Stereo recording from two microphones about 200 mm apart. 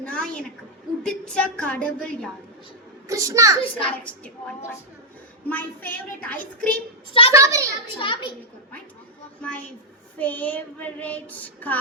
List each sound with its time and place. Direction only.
0.0 s a sound: 5° left (ahead or behind)
1.0 s a woman's voice: 5° left (ahead or behind)
3.1 s a child's voice: 15° right (ahead or behind)
3.6 s a child's voice: 25° left (ahead or behind)
5.5 s child singing: 10° left (ahead or behind)
7.3 s a child's voice: 15° right (ahead or behind)
7.9 s a child's voice: 25° left (ahead or behind)
9.4 s child singing: 5° left (ahead or behind)